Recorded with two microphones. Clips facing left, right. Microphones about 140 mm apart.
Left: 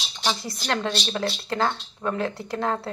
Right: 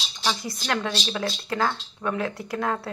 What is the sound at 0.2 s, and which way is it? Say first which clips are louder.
A woman's voice: left 1 dB; 25° left (ahead or behind).